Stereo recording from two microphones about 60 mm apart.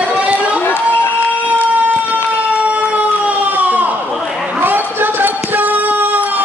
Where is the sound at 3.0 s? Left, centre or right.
Right.